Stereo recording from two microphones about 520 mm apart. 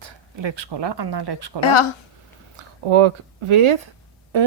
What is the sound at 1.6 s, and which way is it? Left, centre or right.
Speech, left.